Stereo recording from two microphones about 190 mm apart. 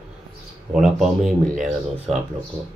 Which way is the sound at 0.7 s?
Centre (ahead or behind).